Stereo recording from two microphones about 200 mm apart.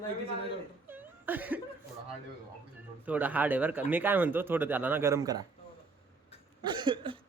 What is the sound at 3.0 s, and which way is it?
Speech, 10° right (ahead or behind).